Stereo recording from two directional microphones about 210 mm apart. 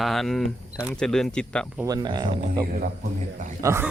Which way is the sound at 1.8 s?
20° right (ahead or behind).